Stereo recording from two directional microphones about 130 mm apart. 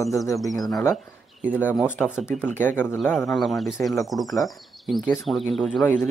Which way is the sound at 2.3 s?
15° left (ahead or behind).